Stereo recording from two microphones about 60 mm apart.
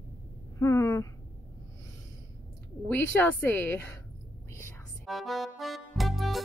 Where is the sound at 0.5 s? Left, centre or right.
Left.